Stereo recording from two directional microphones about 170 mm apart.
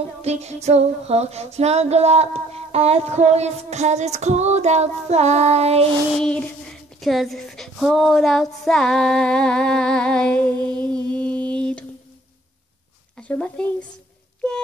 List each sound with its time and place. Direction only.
0.2 s female singing: 40° right (ahead or behind)
6.2 s speech: 5° left (ahead or behind)
13.3 s speech: 5° left (ahead or behind)